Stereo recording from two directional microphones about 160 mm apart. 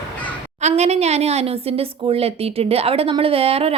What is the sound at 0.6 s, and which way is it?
A woman's voice, 40° right (ahead or behind).